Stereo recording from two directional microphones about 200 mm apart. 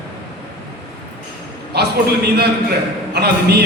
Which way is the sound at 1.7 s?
55° right (ahead or behind).